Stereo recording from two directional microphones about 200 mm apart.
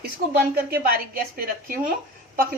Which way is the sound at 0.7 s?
50° right (ahead or behind).